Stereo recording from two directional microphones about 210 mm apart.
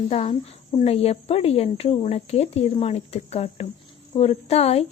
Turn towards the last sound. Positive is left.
turn(degrees=30)  # may be behind; listen again after turning